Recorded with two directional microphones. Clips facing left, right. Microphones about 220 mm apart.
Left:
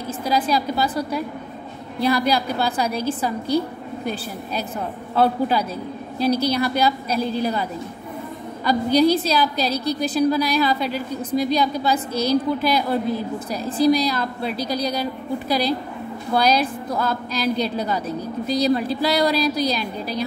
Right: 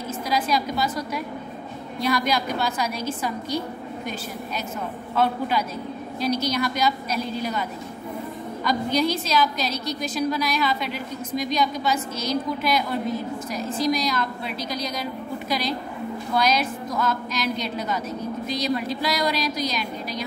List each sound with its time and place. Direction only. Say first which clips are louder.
0.3 s a woman's voice: left 3 dB; 30° left (ahead or behind)
8.6 s a woman's voice: left 6 dB; 35° left (ahead or behind)